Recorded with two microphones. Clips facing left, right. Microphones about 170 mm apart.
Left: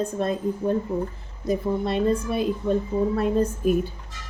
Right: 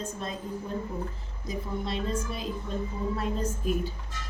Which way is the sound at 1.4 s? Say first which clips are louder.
Left 10 dB; 60° left (ahead or behind).